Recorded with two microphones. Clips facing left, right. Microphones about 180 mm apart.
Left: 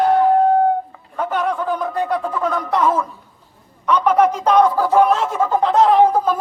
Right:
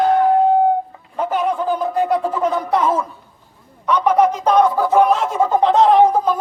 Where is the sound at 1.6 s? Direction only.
25° right (ahead or behind).